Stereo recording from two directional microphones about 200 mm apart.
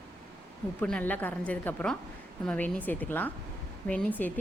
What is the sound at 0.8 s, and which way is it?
Speech, 5° left (ahead or behind).